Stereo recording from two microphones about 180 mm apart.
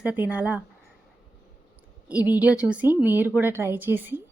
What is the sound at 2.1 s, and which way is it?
A woman's voice, 10° right (ahead or behind).